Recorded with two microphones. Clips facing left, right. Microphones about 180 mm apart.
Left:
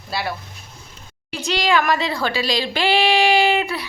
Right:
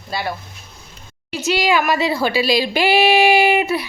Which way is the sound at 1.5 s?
10° right (ahead or behind).